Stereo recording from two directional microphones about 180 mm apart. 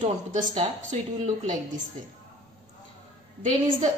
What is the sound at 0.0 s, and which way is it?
Speech, 45° right (ahead or behind).